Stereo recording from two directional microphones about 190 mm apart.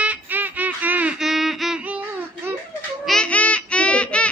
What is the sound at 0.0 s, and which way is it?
Music, 10° right (ahead or behind).